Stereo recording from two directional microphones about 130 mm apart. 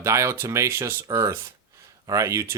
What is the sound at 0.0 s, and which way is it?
Speech, 20° right (ahead or behind).